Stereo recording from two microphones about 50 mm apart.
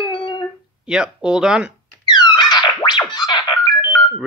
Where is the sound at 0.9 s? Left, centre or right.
Centre.